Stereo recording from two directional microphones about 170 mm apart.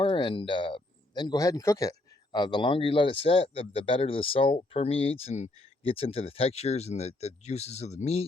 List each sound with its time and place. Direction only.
0.0 s a man's voice: 30° left (ahead or behind)